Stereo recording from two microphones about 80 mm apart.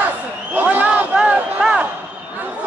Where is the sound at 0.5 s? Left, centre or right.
Centre.